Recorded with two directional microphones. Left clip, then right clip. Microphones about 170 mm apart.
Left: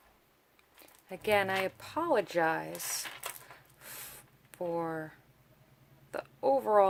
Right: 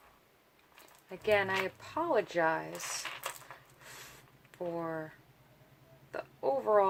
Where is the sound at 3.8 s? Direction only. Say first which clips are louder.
Left 2 dB; 65° left (ahead or behind).